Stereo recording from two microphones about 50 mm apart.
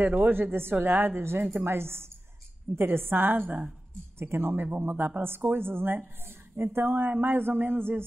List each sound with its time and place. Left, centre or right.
0.0 s a woman's voice: right
0.3 s a woman's voice: right
4.2 s a woman's voice: right